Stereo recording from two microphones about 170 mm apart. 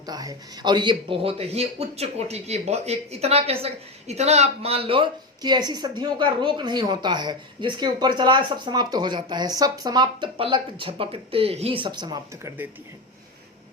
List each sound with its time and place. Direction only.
0.0 s speech: 20° right (ahead or behind)